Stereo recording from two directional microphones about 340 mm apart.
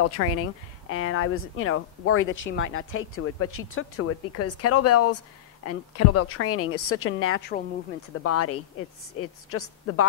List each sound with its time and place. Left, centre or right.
0.0 s speech: left
8.2 s speech: left